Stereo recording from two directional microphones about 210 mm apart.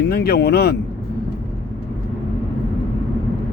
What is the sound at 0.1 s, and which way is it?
Speech, 50° left (ahead or behind).